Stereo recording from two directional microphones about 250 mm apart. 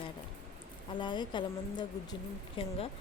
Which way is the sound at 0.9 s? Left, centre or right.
Centre.